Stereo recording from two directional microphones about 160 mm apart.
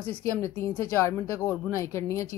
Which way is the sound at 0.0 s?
15° left (ahead or behind).